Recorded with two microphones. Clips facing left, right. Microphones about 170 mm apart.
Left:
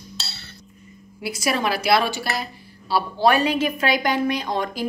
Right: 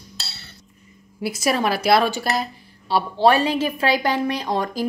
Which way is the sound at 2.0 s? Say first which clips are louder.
Right 3 dB; 45° right (ahead or behind).